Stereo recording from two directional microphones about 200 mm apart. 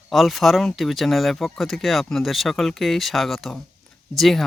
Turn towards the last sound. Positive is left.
turn(degrees=0)  # may be behind; listen again after turning